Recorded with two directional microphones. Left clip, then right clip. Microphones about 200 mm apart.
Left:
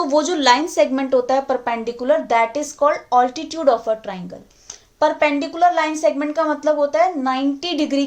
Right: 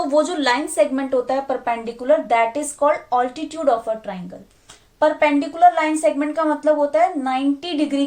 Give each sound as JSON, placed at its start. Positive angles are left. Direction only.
{"t": 0.1, "sound": "a woman's voice", "side_deg": 40}
{"t": 4.9, "sound": "a woman's voice", "side_deg": 40}